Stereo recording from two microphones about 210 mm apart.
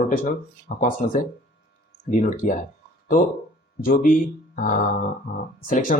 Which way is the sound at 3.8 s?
40° left (ahead or behind).